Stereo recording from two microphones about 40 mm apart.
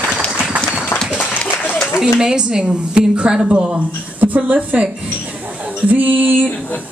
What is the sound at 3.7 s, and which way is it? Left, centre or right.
Speech, right.